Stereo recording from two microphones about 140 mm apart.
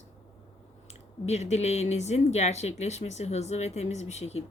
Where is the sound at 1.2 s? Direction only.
50° left (ahead or behind).